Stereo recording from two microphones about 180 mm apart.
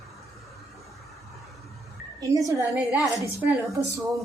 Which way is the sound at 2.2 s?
20° right (ahead or behind).